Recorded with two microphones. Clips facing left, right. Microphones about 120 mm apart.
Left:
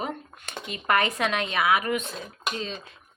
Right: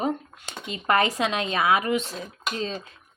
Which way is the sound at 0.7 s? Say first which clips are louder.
Right 2 dB; 30° right (ahead or behind).